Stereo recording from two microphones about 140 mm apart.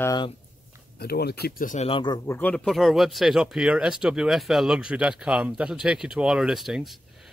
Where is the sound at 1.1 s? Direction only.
80° left.